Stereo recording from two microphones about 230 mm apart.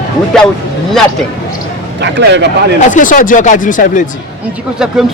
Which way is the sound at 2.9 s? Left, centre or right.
Left.